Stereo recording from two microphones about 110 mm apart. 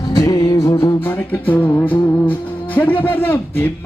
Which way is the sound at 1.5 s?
15° left (ahead or behind).